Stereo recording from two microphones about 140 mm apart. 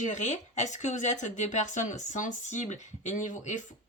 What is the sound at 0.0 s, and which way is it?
Speech, 55° left (ahead or behind).